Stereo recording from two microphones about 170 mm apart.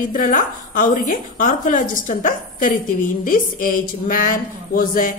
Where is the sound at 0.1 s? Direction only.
50° left (ahead or behind).